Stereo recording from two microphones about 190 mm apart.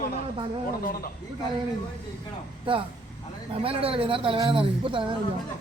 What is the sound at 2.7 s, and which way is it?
Speech, 25° right (ahead or behind).